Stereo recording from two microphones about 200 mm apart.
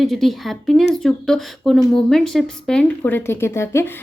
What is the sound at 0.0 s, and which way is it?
Speech, centre (ahead or behind).